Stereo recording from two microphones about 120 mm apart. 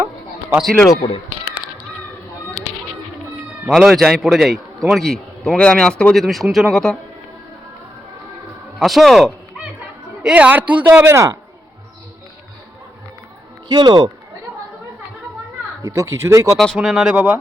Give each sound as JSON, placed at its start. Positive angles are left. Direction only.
{"t": 1.0, "sound": "a sound", "side_deg": 45}
{"t": 3.7, "sound": "a man's voice", "side_deg": 0}
{"t": 8.8, "sound": "a man's voice", "side_deg": 0}
{"t": 13.7, "sound": "speech", "side_deg": -35}
{"t": 15.8, "sound": "speech", "side_deg": -25}
{"t": 16.6, "sound": "a man's voice", "side_deg": 0}